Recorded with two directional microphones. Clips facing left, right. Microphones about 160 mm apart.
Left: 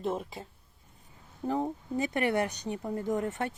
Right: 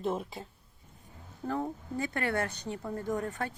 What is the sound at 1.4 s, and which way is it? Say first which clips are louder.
Speech: left 3 dB; 15° left (ahead or behind).